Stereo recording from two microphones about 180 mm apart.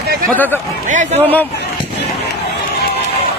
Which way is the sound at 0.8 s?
45° right (ahead or behind).